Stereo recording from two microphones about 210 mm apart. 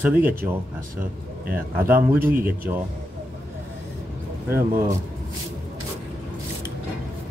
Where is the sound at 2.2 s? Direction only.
45° right (ahead or behind).